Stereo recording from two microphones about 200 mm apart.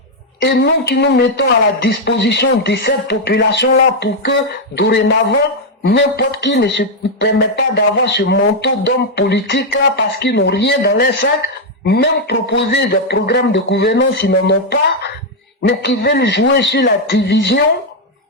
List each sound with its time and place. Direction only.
0.4 s speech: 60° left (ahead or behind)